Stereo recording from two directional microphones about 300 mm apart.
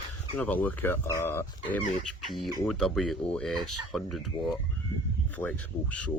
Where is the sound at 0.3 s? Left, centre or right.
Centre.